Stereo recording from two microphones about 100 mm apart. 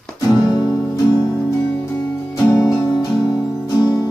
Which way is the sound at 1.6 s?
15° left (ahead or behind).